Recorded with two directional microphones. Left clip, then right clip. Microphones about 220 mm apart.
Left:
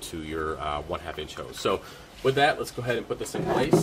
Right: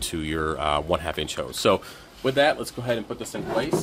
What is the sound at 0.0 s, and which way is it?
Speech, 45° right (ahead or behind).